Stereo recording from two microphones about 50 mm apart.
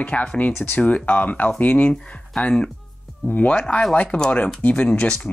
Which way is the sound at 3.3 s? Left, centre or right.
Left.